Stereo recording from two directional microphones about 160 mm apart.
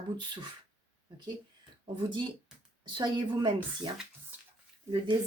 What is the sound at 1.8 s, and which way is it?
Speech, 30° right (ahead or behind).